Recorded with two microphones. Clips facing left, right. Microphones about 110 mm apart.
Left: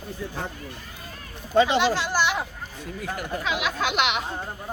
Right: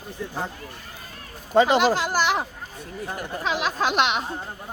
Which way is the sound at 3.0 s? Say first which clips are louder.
Right 1 dB; 30° right (ahead or behind).